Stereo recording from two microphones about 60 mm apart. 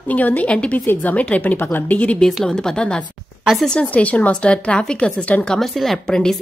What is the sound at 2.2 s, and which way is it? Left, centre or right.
A woman's voice, centre.